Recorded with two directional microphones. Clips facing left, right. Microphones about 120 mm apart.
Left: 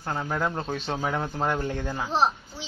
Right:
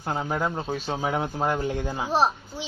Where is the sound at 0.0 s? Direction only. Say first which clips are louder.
Right 1 dB; 15° right (ahead or behind).